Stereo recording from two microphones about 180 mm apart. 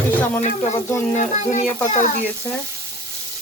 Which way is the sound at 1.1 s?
40° left (ahead or behind).